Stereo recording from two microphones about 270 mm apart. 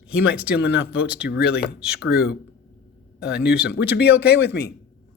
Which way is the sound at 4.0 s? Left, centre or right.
Left.